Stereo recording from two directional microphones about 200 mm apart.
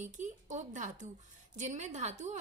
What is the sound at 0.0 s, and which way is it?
A woman's voice, 40° right (ahead or behind).